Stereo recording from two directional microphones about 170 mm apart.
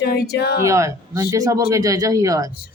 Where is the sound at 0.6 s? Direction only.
20° right (ahead or behind).